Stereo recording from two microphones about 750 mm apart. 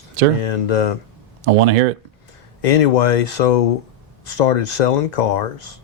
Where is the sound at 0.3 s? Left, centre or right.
Left.